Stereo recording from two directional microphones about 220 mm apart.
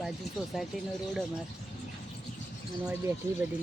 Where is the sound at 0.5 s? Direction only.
Centre (ahead or behind).